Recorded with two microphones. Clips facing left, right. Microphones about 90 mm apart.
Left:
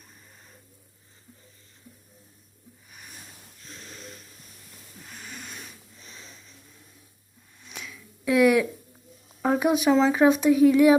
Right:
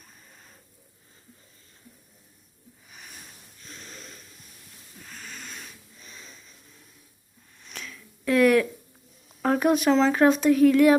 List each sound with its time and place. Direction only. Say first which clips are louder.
3.7 s snort: even; 15° left (ahead or behind)
3.9 s a sound: left 2 dB; 5° left (ahead or behind)
5.0 s music: even; 15° left (ahead or behind)
6.1 s a sound: even; 20° left (ahead or behind)
7.6 s finger snapping: even; 10° left (ahead or behind)
9.4 s speech: even; 10° left (ahead or behind)